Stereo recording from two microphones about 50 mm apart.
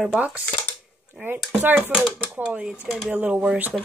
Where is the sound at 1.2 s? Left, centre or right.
Right.